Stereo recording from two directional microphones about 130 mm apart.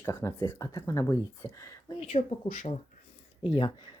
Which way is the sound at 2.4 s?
70° left (ahead or behind).